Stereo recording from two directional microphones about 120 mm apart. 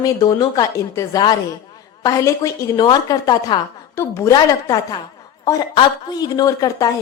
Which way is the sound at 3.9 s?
20° left (ahead or behind).